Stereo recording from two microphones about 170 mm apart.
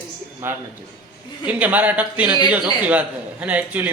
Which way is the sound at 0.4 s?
15° right (ahead or behind).